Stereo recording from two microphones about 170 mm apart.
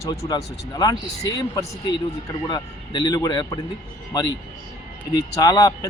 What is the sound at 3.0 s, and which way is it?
Speech, 25° left (ahead or behind).